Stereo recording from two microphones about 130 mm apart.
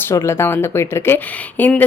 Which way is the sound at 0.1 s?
20° left (ahead or behind).